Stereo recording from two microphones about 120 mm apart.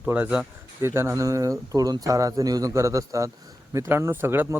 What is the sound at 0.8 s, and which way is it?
Speech, 20° right (ahead or behind).